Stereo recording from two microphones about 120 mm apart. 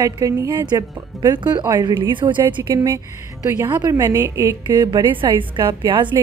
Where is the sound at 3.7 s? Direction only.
30° right (ahead or behind).